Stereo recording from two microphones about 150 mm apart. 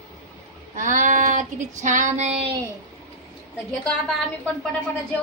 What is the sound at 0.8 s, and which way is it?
Child singing, 60° right (ahead or behind).